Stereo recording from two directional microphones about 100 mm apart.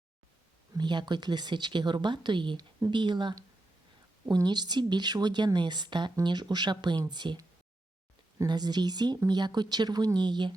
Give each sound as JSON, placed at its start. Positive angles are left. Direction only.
{"t": 0.8, "sound": "speech", "side_deg": -50}
{"t": 8.4, "sound": "speech", "side_deg": -45}